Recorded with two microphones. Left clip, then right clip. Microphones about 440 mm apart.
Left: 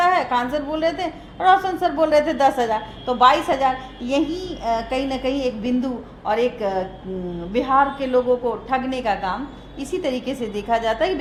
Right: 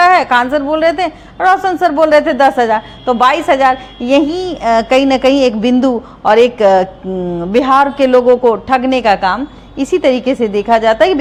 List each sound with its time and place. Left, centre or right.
0.0 s a woman's voice: right